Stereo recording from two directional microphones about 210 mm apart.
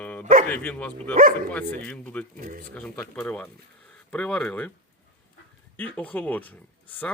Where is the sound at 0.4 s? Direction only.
5° left (ahead or behind).